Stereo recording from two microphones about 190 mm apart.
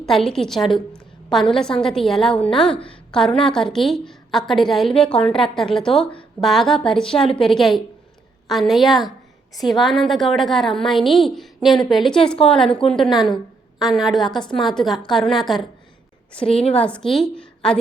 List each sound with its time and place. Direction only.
0.0 s a woman's voice: centre (ahead or behind)
16.5 s a woman's voice: 30° left (ahead or behind)
16.7 s a woman's voice: 5° left (ahead or behind)